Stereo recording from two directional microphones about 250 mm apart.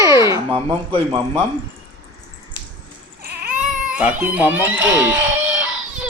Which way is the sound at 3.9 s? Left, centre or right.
Centre.